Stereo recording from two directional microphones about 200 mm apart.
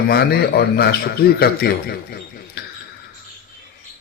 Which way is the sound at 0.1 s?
50° left (ahead or behind).